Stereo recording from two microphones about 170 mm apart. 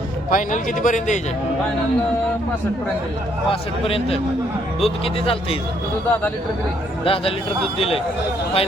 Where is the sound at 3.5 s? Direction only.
35° left (ahead or behind).